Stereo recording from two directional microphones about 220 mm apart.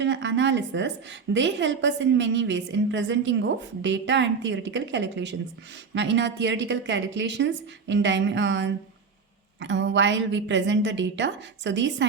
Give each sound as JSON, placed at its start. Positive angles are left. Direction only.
{"t": 0.0, "sound": "a woman's voice", "side_deg": -55}